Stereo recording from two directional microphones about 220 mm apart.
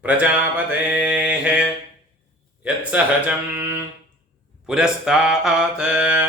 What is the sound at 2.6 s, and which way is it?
Speech, 5° right (ahead or behind).